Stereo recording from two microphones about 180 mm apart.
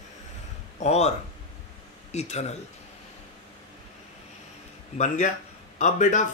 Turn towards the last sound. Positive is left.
turn(degrees=45)  # may be behind; listen again after turning